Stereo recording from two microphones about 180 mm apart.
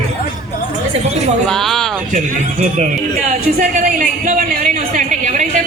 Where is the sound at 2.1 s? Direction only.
40° right (ahead or behind).